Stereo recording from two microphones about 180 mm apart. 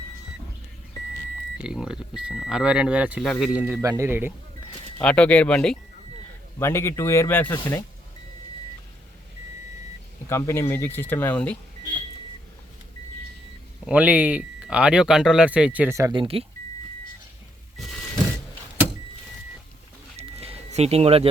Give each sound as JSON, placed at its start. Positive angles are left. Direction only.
{"t": 1.6, "sound": "speech", "side_deg": -5}
{"t": 4.9, "sound": "speech", "side_deg": 5}
{"t": 10.2, "sound": "speech", "side_deg": 15}
{"t": 13.8, "sound": "speech", "side_deg": -5}
{"t": 16.2, "sound": "speech", "side_deg": -30}
{"t": 20.1, "sound": "a sound", "side_deg": -35}